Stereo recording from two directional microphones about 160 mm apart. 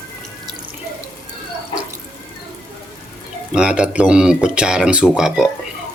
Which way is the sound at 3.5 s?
5° right (ahead or behind).